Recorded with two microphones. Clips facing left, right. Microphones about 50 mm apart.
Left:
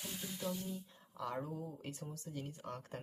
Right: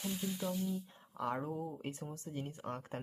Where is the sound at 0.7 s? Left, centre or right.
Right.